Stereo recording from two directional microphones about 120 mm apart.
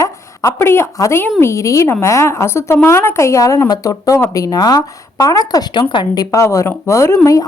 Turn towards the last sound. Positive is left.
turn(degrees=30)  # may be behind; listen again after turning